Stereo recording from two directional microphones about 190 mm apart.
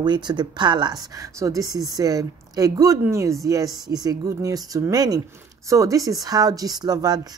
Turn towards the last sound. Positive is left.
turn(degrees=-20)  # may be behind; listen again after turning